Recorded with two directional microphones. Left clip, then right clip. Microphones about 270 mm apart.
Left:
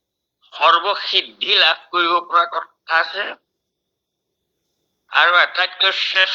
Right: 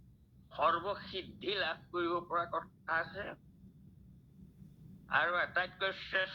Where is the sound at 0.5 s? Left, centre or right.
Left.